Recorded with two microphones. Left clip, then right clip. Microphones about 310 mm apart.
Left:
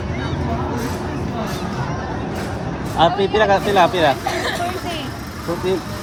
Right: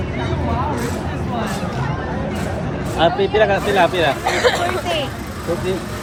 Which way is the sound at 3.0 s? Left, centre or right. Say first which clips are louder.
Even; left.